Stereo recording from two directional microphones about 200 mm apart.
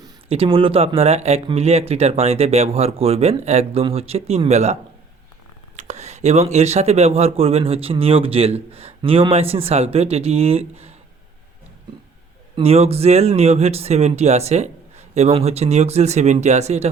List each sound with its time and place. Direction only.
0.0 s speech: 25° right (ahead or behind)
12.5 s speech: 30° right (ahead or behind)